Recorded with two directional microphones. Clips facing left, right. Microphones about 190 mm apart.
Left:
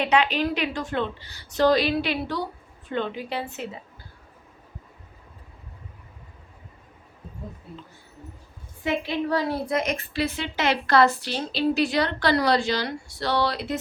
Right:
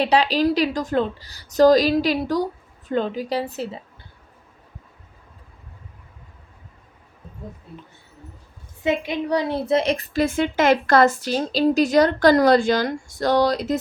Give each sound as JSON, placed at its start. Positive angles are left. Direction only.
{"t": 0.0, "sound": "a woman's voice", "side_deg": -35}
{"t": 8.8, "sound": "a woman's voice", "side_deg": -20}